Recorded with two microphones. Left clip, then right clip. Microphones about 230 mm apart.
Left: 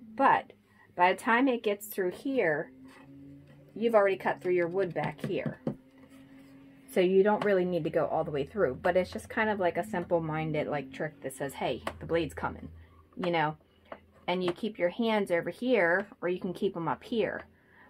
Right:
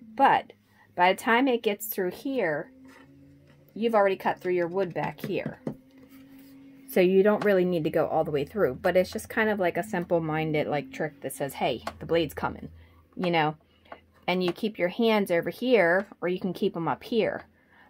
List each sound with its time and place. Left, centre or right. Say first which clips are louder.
0.1 s speech: right 3 dB; right
3.8 s speech: right 2 dB; right
6.9 s speech: right 3 dB; right